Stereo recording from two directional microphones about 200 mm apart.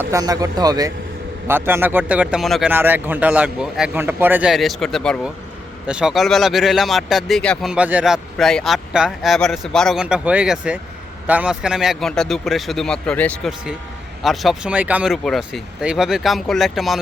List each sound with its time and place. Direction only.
0.0 s speech: 15° right (ahead or behind); by 17.0 s centre (ahead or behind)